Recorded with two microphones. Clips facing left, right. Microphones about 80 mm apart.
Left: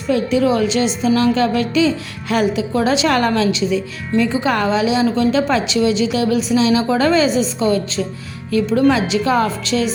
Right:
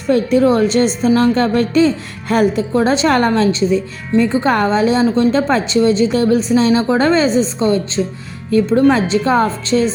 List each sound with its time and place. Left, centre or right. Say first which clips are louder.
0.1 s a woman's voice: right 3 dB; right